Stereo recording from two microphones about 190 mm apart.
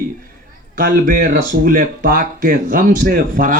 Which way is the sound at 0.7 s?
50° right (ahead or behind).